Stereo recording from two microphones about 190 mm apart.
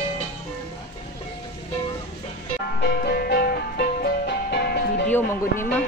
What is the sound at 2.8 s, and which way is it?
Music, 55° left (ahead or behind).